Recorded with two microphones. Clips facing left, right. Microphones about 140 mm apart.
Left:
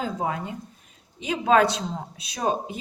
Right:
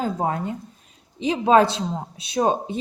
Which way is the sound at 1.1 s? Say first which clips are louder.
Right 3 dB; 30° right (ahead or behind).